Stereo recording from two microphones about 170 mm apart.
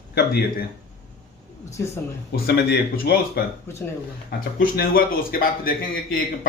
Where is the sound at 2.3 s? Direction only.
70° left (ahead or behind).